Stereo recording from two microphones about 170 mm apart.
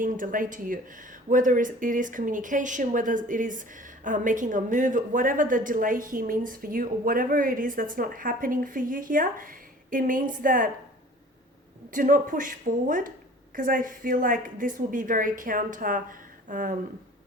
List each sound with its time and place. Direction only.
0.0 s speech: 50° right (ahead or behind)
11.9 s speech: 50° right (ahead or behind)